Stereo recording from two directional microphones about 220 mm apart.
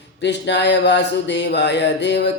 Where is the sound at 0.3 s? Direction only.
50° left (ahead or behind).